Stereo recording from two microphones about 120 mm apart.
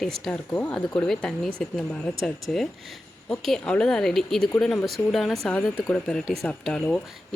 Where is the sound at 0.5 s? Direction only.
10° left (ahead or behind).